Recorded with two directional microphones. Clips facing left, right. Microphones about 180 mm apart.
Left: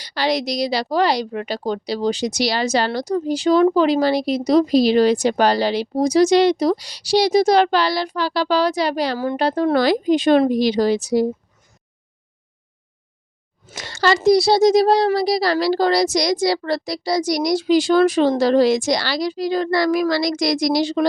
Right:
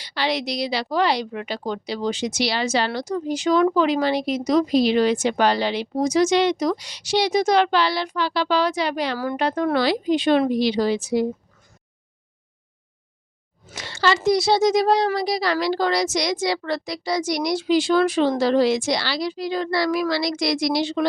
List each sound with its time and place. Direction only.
0.0 s a woman's voice: 40° left (ahead or behind)
9.1 s a woman's voice: 20° left (ahead or behind)
9.4 s a woman's voice: 35° left (ahead or behind)
9.8 s a woman's voice: 45° left (ahead or behind)
13.7 s a woman's voice: 45° left (ahead or behind)